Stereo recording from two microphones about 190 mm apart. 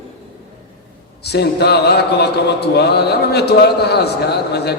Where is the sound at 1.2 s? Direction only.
60° left (ahead or behind).